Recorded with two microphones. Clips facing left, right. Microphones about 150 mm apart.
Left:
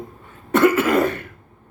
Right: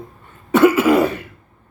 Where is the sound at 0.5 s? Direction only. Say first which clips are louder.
Right 3 dB; 10° right (ahead or behind).